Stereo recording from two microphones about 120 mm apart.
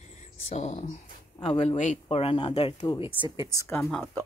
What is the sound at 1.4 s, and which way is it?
Speech, 60° left (ahead or behind).